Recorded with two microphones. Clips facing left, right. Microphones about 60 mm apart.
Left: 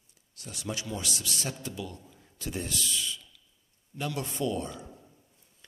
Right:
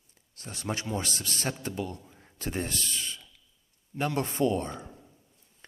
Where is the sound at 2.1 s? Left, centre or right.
Right.